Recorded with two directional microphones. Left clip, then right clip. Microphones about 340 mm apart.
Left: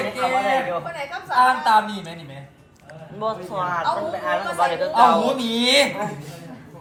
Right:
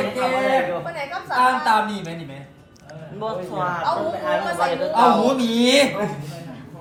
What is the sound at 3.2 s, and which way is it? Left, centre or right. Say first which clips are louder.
A woman's voice: even; centre.